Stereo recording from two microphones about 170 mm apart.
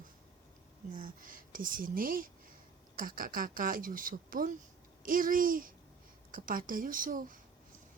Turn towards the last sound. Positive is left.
turn(degrees=-55)  # may be behind; listen again after turning